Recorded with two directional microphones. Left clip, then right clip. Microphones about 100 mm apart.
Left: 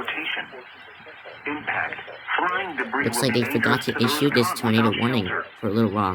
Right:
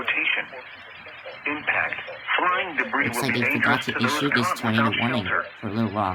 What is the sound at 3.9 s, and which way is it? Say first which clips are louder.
Speech: left 1 dB; 20° right (ahead or behind).